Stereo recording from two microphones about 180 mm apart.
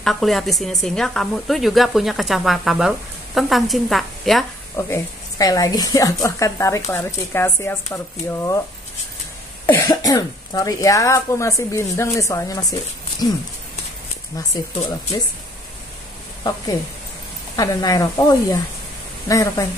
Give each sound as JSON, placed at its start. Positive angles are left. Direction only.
{"t": 0.0, "sound": "a woman's voice", "side_deg": 0}
{"t": 4.7, "sound": "speech", "side_deg": 15}
{"t": 9.7, "sound": "speech", "side_deg": 15}
{"t": 14.3, "sound": "speech", "side_deg": 20}
{"t": 17.6, "sound": "speech", "side_deg": 20}